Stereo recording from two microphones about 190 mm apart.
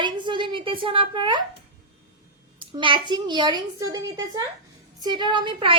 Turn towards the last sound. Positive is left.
turn(degrees=-25)  # may be behind; listen again after turning